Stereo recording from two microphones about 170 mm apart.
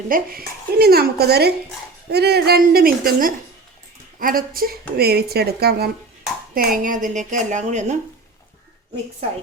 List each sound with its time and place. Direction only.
0.1 s a woman's voice: 60° right (ahead or behind); by 7.9 s 45° right (ahead or behind)